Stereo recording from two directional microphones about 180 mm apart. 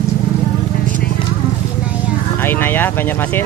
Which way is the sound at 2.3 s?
10° left (ahead or behind).